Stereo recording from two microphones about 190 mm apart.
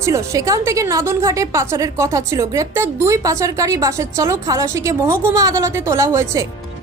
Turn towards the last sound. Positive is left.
turn(degrees=-15)  # may be behind; listen again after turning